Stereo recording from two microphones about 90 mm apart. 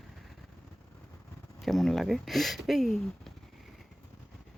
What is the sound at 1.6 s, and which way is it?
Speech, 5° left (ahead or behind).